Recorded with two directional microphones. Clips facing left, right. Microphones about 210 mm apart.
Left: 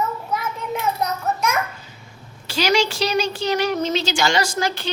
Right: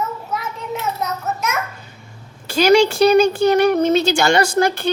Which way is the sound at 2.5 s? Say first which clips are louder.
Right 7 dB; 50° right (ahead or behind).